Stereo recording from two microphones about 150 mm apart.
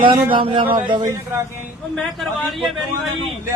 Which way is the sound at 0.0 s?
35° right (ahead or behind).